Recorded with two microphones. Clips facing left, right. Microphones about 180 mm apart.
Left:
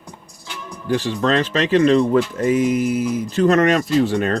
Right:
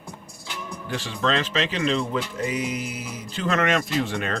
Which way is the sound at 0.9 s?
40° left (ahead or behind).